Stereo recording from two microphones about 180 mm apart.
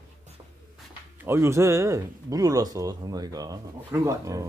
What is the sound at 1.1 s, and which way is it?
Speech, 15° right (ahead or behind).